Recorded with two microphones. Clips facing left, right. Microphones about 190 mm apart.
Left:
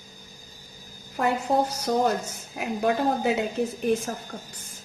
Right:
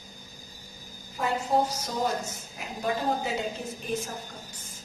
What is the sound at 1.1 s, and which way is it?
A woman's voice, 60° left (ahead or behind).